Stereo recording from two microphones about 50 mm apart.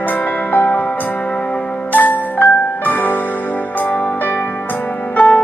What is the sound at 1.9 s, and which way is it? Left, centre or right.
Music, left.